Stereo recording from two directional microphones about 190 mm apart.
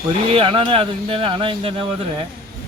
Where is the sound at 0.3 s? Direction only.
30° right (ahead or behind).